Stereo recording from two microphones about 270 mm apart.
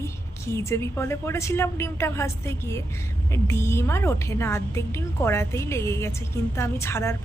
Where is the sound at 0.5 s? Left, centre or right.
Centre.